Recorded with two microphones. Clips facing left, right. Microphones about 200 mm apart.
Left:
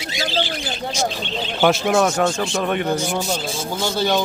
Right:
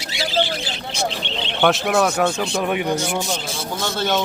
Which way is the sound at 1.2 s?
70° right (ahead or behind).